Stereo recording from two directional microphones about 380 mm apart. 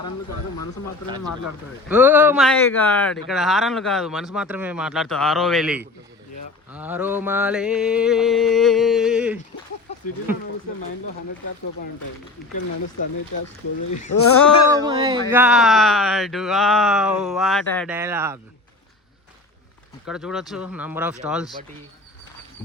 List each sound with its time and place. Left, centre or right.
1.9 s speech: centre
12.5 s speech: left
14.1 s speech: left
14.8 s a sound: centre
15.3 s speech: centre
20.1 s speech: centre